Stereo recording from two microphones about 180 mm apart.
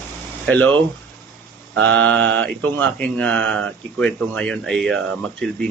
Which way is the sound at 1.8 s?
90° right.